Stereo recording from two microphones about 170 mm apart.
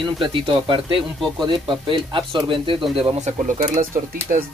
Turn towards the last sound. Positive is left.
turn(degrees=-55)  # may be behind; listen again after turning